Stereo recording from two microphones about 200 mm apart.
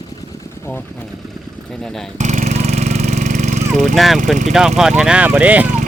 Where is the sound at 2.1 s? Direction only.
35° right (ahead or behind).